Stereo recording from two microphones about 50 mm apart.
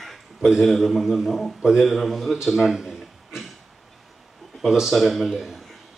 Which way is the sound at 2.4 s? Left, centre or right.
Centre.